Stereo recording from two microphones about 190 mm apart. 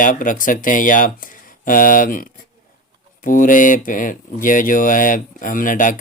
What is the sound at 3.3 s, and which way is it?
Speech, 45° left (ahead or behind).